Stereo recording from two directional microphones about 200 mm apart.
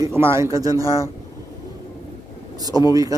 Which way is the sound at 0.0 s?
15° right (ahead or behind).